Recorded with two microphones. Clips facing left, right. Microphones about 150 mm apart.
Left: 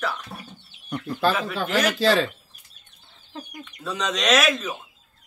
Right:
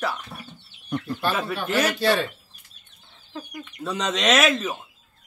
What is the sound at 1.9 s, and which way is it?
Speech, 90° left.